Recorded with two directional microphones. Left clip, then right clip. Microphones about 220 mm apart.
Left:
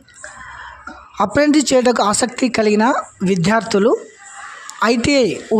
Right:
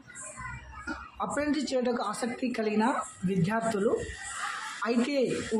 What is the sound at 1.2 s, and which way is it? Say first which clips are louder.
Speech: left 17 dB; 50° left (ahead or behind).